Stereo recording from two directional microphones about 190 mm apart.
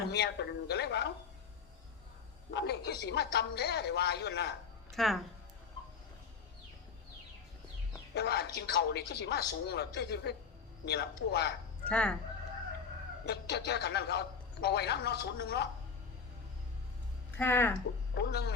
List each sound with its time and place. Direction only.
0.1 s a man's voice: 60° left (ahead or behind)
2.5 s a man's voice: 65° left (ahead or behind)
4.9 s speech: centre (ahead or behind)
8.1 s a man's voice: 60° left (ahead or behind)
11.9 s speech: 5° left (ahead or behind)
13.2 s a man's voice: 60° left (ahead or behind)
17.3 s speech: 10° left (ahead or behind)
18.2 s a man's voice: 60° left (ahead or behind)